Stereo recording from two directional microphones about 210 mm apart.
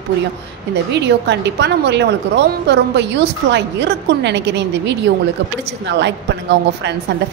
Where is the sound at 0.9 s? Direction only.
55° right (ahead or behind).